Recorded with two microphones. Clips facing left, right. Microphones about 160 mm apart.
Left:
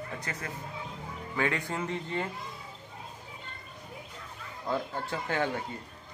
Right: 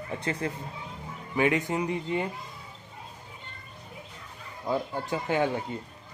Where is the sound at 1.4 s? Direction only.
20° right (ahead or behind).